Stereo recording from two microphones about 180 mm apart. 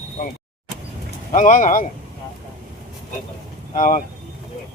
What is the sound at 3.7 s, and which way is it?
Speech, 45° left (ahead or behind).